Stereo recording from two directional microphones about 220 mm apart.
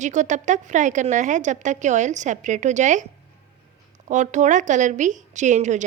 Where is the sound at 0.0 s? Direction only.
35° right (ahead or behind).